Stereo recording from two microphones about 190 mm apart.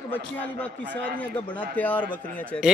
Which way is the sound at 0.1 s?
10° left (ahead or behind).